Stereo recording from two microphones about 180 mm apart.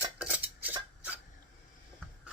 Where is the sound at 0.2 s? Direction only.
10° right (ahead or behind).